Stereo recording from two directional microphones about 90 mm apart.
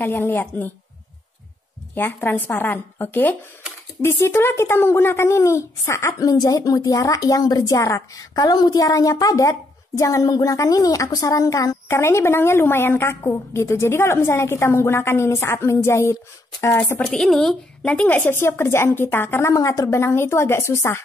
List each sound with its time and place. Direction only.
0.0 s a woman's voice: 20° left (ahead or behind)
2.0 s a woman's voice: 20° left (ahead or behind)
6.1 s a woman's voice: 40° left (ahead or behind)
17.0 s a woman's voice: centre (ahead or behind)
18.2 s a woman's voice: 30° left (ahead or behind)
19.5 s speech: 40° left (ahead or behind)
20.0 s a woman's voice: 25° left (ahead or behind)